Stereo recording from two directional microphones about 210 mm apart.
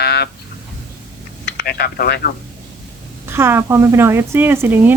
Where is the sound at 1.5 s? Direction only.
45° left (ahead or behind).